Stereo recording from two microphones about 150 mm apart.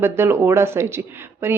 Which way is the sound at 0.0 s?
15° right (ahead or behind).